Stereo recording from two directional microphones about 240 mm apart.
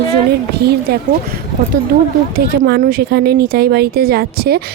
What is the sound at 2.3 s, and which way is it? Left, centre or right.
A woman's voice, right.